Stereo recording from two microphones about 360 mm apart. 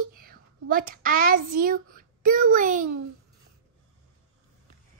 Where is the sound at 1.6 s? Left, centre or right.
Right.